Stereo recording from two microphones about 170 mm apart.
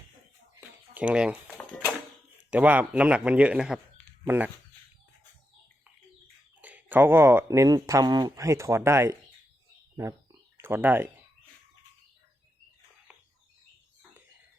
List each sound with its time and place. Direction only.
0.9 s speech: 5° right (ahead or behind)
1.5 s a sound: 5° left (ahead or behind)
2.5 s speech: 10° right (ahead or behind)
6.6 s speech: 10° right (ahead or behind)
10.6 s speech: 10° right (ahead or behind)